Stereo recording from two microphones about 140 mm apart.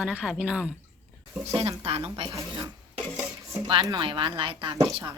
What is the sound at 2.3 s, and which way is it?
Speech, 20° right (ahead or behind).